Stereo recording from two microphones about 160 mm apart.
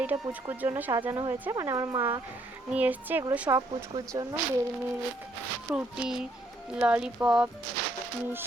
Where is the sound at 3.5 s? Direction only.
25° right (ahead or behind).